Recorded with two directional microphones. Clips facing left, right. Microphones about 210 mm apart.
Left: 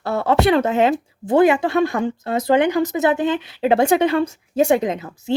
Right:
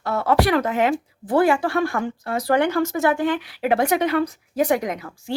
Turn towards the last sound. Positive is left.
turn(degrees=25)  # may be behind; listen again after turning